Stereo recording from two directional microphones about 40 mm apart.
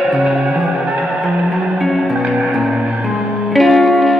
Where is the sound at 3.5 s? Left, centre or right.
Centre.